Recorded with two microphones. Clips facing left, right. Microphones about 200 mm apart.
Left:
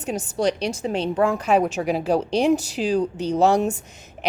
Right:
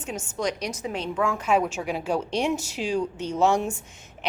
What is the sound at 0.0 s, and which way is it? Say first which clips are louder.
A woman's voice: left 6 dB; 35° left (ahead or behind).